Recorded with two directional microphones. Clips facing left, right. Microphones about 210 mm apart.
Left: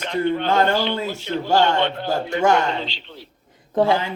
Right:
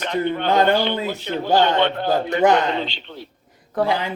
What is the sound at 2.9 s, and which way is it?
Speech, 55° right (ahead or behind).